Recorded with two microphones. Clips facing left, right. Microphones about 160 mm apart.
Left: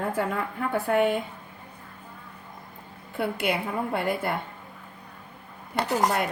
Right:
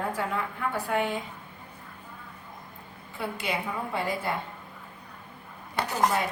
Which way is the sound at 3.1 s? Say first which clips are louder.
Left 5 dB; 60° left (ahead or behind).